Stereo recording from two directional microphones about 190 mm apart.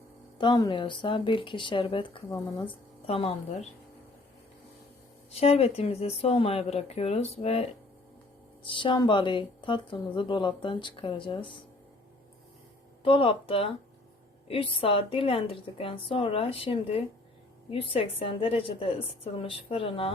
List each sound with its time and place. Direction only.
0.3 s speech: 25° left (ahead or behind)
5.3 s speech: 30° left (ahead or behind)
13.1 s speech: 30° left (ahead or behind)